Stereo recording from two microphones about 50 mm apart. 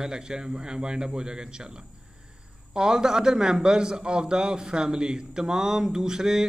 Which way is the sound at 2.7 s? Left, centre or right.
Centre.